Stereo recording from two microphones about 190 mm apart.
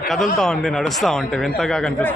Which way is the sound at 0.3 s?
Centre (ahead or behind).